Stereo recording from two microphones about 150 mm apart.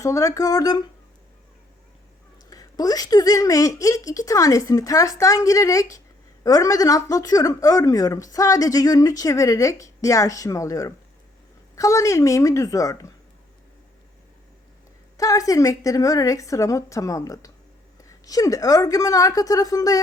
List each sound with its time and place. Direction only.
0.0 s speech: 20° left (ahead or behind)
2.5 s speech: 25° left (ahead or behind)
15.2 s speech: 20° left (ahead or behind)